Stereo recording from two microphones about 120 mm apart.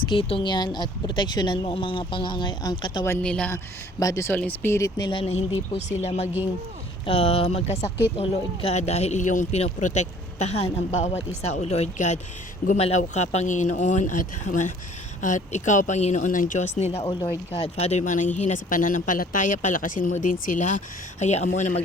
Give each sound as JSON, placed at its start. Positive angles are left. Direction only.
{"t": 0.0, "sound": "speech", "side_deg": 45}
{"t": 1.6, "sound": "speech", "side_deg": 50}
{"t": 3.2, "sound": "speech", "side_deg": 10}
{"t": 4.0, "sound": "speech", "side_deg": 25}
{"t": 4.9, "sound": "speech", "side_deg": 35}
{"t": 5.2, "sound": "speech", "side_deg": 65}
{"t": 7.0, "sound": "a man's voice", "side_deg": 50}